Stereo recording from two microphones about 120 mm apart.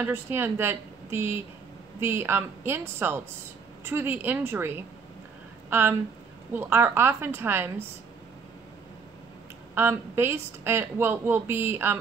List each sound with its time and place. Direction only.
0.0 s a woman's voice: 20° right (ahead or behind)
9.8 s a woman's voice: 20° right (ahead or behind)